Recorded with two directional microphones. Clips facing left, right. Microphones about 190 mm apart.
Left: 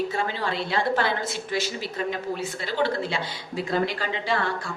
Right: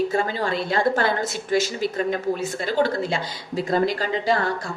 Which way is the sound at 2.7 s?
45° right (ahead or behind).